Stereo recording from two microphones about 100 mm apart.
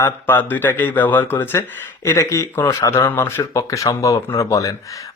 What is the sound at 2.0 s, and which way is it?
Speech, 30° left (ahead or behind).